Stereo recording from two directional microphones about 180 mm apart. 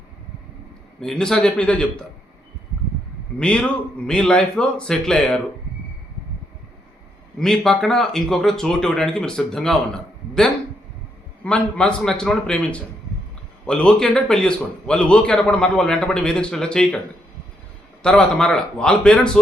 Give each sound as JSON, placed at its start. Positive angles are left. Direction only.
{"t": 0.9, "sound": "a man's voice", "side_deg": 5}
{"t": 3.3, "sound": "a man's voice", "side_deg": 5}
{"t": 7.3, "sound": "a man's voice", "side_deg": 5}
{"t": 11.4, "sound": "a man's voice", "side_deg": 5}
{"t": 18.0, "sound": "a man's voice", "side_deg": 5}